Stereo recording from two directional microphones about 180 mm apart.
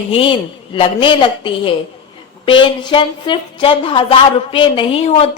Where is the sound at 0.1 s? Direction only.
30° left (ahead or behind).